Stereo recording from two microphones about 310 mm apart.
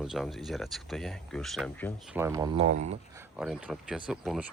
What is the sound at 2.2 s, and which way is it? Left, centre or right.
Speech, centre.